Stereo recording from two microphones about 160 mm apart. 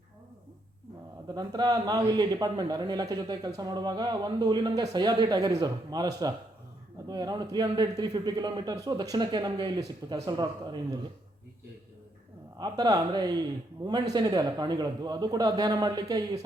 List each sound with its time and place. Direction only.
1.3 s a man's voice: 25° right (ahead or behind)
12.5 s a man's voice: 25° right (ahead or behind)